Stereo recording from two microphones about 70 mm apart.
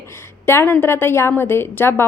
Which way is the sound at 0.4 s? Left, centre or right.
Left.